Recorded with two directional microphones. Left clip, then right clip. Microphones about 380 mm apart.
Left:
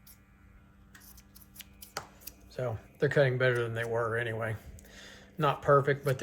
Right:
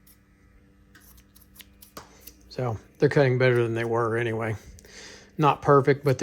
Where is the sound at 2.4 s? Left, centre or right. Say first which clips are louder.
Right 5 dB; centre.